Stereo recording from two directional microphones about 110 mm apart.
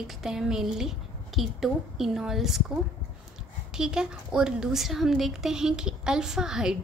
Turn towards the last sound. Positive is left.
turn(degrees=-5)  # may be behind; listen again after turning